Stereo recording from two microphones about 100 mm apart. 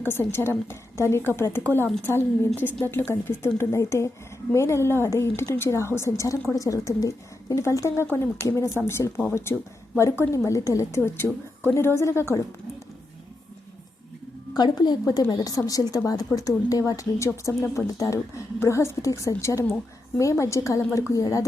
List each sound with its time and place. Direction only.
0.0 s a woman's voice: 20° left (ahead or behind)
14.5 s a woman's voice: 45° left (ahead or behind)